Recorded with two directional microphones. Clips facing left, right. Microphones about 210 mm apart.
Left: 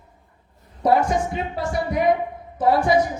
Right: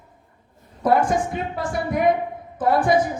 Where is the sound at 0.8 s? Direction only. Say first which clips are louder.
Even; 50° right (ahead or behind).